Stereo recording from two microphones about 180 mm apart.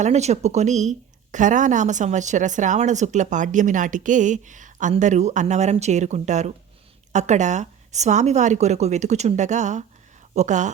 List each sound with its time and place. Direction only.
0.0 s a woman's voice: 40° right (ahead or behind)